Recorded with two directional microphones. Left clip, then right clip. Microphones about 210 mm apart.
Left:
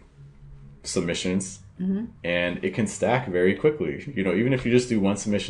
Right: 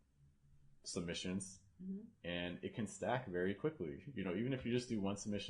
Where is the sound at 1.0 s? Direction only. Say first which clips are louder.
Left 17 dB; 40° right (ahead or behind).